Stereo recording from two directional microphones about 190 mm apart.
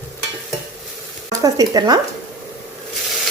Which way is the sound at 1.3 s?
20° right (ahead or behind).